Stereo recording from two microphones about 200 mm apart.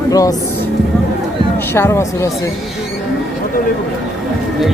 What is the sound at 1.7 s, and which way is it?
Speech, 15° left (ahead or behind).